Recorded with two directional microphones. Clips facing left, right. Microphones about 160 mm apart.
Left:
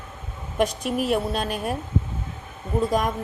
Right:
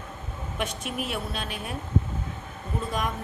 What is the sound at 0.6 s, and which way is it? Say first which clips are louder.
Speech: left 9 dB; 40° left (ahead or behind).